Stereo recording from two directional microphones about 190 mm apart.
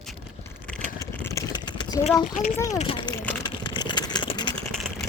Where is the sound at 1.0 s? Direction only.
20° left (ahead or behind).